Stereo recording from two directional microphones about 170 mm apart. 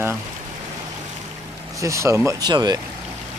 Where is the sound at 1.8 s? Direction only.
20° right (ahead or behind).